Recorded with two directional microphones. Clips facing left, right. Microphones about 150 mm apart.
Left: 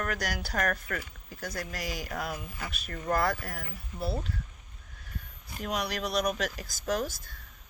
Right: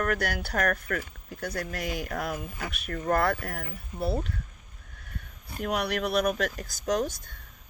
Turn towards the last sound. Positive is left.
turn(degrees=-45)  # may be behind; listen again after turning